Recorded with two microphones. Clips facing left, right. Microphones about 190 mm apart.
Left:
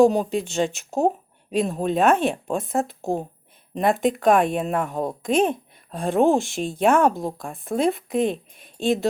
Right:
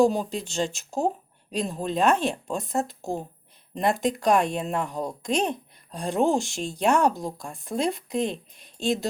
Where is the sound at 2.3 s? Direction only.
55° left (ahead or behind).